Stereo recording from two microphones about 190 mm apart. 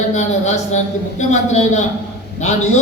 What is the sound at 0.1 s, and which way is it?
A man's voice, 35° left (ahead or behind).